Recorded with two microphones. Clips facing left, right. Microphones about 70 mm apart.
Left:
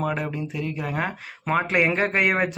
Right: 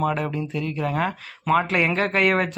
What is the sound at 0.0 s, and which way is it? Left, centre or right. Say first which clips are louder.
Speech: right 3 dB; centre.